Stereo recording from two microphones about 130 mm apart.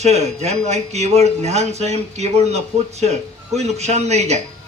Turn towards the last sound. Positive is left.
turn(degrees=-60)  # may be behind; listen again after turning